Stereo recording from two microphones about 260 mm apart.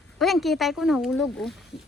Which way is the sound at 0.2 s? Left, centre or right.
Centre.